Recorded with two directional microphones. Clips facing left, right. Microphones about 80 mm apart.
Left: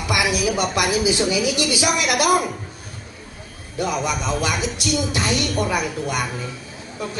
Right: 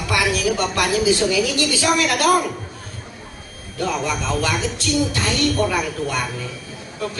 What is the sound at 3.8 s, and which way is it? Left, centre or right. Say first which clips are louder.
A man's voice: even; centre.